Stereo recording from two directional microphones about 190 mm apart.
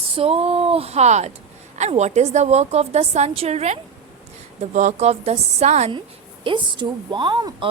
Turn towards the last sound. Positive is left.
turn(degrees=-25)  # may be behind; listen again after turning